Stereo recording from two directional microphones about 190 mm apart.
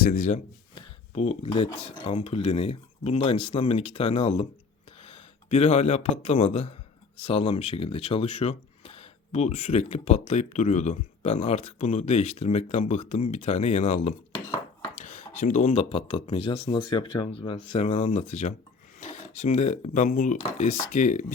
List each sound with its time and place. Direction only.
0.0 s speech: 45° left (ahead or behind)
0.8 s a sound: 30° left (ahead or behind)
1.5 s a man's voice: 30° left (ahead or behind)